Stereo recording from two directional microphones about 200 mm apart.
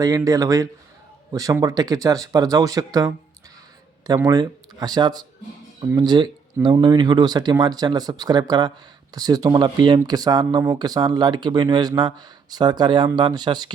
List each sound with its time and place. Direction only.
0.0 s speech: 20° right (ahead or behind)